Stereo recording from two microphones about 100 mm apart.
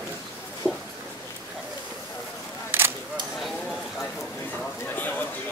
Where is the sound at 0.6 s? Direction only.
15° left (ahead or behind).